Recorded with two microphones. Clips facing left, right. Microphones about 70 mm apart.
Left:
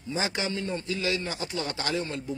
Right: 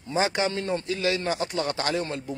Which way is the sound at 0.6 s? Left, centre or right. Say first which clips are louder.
Right 4 dB; right.